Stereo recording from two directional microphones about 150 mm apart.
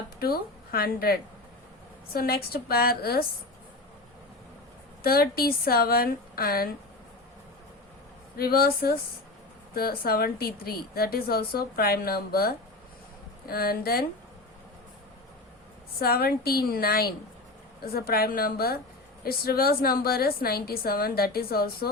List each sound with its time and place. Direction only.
0.2 s a woman's voice: 85° left
5.0 s a woman's voice: 90° left
8.4 s a woman's voice: 90° left
16.0 s a woman's voice: 90° left